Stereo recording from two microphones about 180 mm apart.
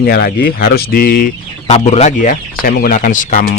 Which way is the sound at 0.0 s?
60° left (ahead or behind).